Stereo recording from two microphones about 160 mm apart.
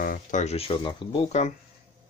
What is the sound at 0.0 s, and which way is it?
Speech, 55° left (ahead or behind).